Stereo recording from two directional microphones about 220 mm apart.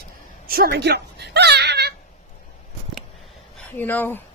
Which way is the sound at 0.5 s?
45° right (ahead or behind).